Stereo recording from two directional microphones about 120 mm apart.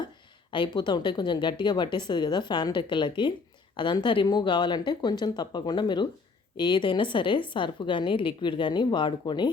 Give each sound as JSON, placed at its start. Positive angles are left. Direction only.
{"t": 0.5, "sound": "a woman's voice", "side_deg": 40}